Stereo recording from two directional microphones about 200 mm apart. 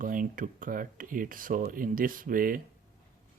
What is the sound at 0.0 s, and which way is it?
Speech, 45° right (ahead or behind).